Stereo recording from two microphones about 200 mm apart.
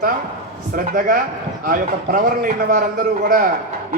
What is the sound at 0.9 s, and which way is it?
A man's voice, 45° right (ahead or behind).